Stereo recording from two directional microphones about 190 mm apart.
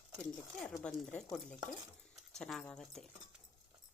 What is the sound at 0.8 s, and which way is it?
Speech, 5° left (ahead or behind).